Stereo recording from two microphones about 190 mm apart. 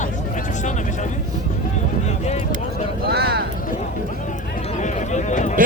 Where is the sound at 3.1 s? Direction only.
60° right (ahead or behind).